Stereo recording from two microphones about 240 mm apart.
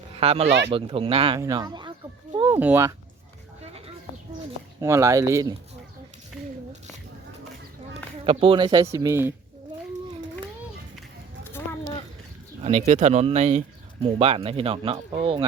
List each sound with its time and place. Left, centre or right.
0.2 s speech: right
0.4 s speech: right
0.7 s speech: right
2.3 s a sound: centre
4.8 s speech: centre
8.2 s speech: right
12.6 s speech: right